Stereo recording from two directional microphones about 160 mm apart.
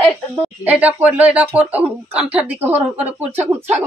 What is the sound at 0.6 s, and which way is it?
Speech, 10° right (ahead or behind).